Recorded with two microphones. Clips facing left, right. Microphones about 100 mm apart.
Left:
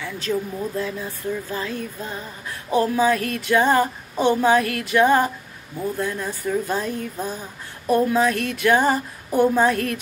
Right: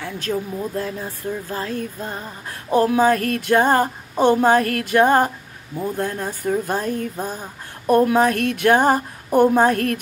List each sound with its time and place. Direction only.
0.3 s speech: 30° right (ahead or behind)
0.7 s speech: 45° right (ahead or behind)